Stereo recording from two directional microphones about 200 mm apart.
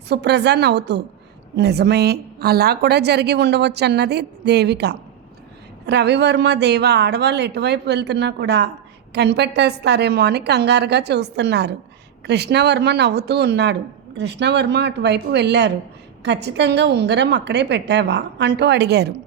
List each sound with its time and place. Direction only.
0.1 s a woman's voice: 55° right (ahead or behind)